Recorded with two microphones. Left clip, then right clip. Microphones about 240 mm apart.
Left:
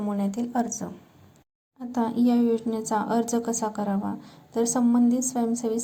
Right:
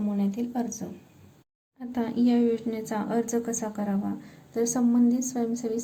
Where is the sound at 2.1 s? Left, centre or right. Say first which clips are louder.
Even; left.